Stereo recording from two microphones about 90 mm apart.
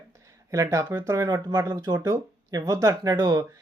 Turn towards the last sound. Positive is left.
turn(degrees=-45)  # may be behind; listen again after turning